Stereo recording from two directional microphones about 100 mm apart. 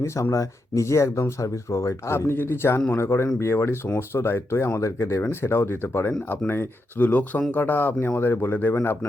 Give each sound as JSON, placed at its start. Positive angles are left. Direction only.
{"t": 0.0, "sound": "speech", "side_deg": 30}